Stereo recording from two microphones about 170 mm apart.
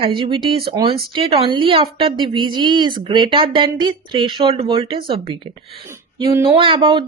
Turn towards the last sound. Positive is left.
turn(degrees=-30)  # may be behind; listen again after turning